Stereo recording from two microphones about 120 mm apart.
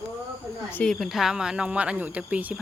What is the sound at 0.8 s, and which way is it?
Speech, centre (ahead or behind).